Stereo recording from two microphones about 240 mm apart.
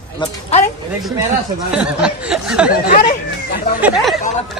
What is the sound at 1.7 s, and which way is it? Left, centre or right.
Speech, centre.